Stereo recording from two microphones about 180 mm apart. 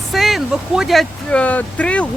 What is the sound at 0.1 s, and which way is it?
Speech, centre (ahead or behind).